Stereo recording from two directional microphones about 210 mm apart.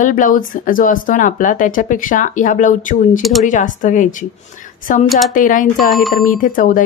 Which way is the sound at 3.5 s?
35° left (ahead or behind).